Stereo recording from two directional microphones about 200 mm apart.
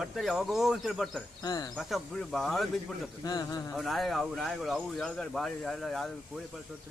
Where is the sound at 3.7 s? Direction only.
Centre (ahead or behind).